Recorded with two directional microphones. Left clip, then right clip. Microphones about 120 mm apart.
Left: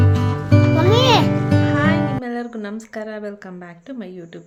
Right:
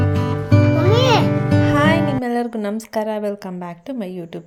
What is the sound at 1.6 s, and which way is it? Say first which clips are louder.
Music: right 5 dB; 50° right (ahead or behind).